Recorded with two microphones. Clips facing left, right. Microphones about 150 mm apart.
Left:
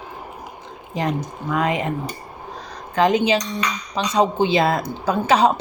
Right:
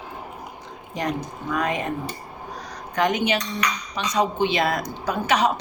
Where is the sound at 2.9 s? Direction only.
30° left (ahead or behind).